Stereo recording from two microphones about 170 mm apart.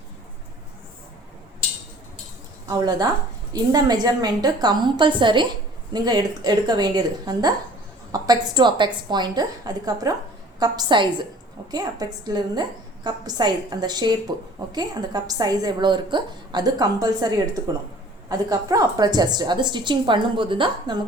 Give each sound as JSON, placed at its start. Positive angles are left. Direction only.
{"t": 2.6, "sound": "a woman's voice", "side_deg": -25}